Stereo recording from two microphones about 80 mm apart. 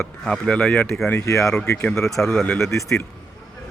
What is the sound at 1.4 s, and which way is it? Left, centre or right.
Speech, centre.